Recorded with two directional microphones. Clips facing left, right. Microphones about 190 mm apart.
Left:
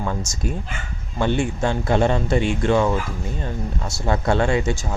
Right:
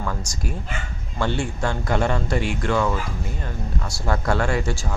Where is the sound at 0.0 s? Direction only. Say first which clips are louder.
Left 3 dB; 25° left (ahead or behind).